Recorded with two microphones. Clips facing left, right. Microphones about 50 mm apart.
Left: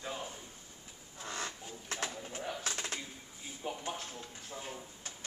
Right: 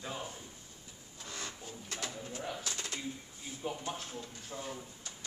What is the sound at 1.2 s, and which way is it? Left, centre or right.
Speech, left.